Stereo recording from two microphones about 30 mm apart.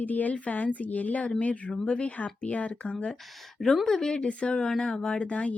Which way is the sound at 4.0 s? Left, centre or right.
Left.